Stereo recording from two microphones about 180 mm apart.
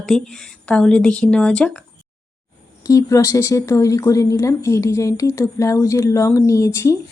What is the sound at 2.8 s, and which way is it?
Speech, 20° left (ahead or behind).